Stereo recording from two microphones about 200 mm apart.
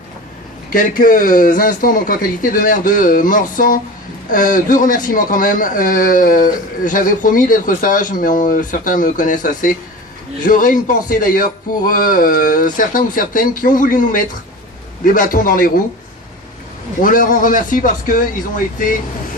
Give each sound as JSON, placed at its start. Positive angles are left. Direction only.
{"t": 0.7, "sound": "a man's voice", "side_deg": 45}
{"t": 17.0, "sound": "a man's voice", "side_deg": 45}